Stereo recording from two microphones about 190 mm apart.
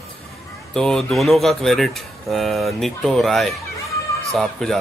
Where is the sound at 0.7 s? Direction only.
5° left (ahead or behind).